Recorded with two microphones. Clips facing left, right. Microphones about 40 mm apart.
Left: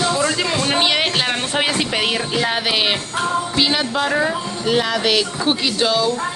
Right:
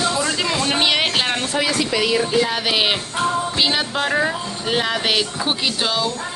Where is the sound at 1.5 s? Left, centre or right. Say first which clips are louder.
Even; left.